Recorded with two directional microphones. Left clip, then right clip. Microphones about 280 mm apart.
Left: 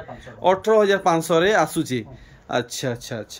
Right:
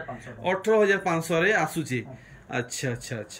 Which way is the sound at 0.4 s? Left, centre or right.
Centre.